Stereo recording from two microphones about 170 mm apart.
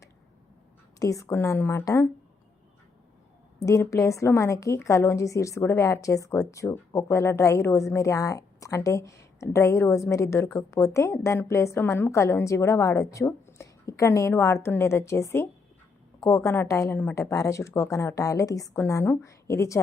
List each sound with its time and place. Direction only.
0.9 s a woman's voice: 20° left (ahead or behind)
3.7 s a woman's voice: 20° left (ahead or behind)